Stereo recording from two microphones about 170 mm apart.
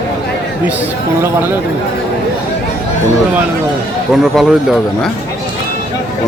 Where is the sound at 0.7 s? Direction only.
10° right (ahead or behind).